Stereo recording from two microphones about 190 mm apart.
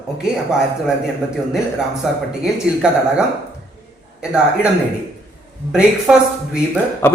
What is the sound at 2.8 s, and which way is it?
Speech, 5° right (ahead or behind).